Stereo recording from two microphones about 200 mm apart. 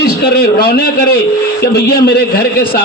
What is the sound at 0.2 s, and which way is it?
A man's voice, 50° left (ahead or behind).